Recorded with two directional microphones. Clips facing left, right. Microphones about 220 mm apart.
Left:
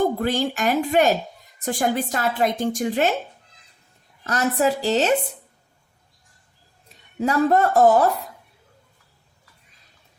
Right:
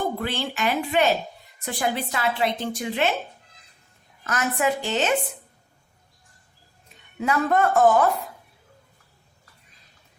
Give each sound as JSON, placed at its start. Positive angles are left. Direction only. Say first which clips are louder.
{"t": 0.0, "sound": "a woman's voice", "louder": "left 6 dB", "side_deg": 45}
{"t": 4.2, "sound": "speech", "louder": "left 4 dB", "side_deg": 35}
{"t": 6.8, "sound": "speech", "louder": "left 3 dB", "side_deg": 35}